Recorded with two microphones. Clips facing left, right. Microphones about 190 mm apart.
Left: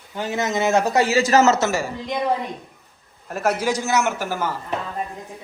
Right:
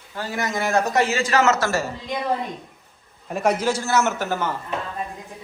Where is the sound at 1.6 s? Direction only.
15° left (ahead or behind).